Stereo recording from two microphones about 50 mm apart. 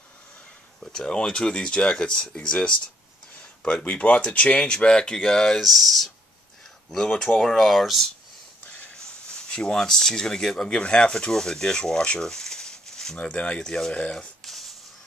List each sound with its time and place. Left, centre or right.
0.7 s speech: centre
5.2 s speech: centre
7.2 s speech: centre
9.0 s speech: centre
14.1 s a sound: centre